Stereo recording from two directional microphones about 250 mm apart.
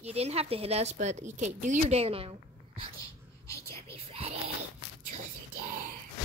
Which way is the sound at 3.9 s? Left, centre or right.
Right.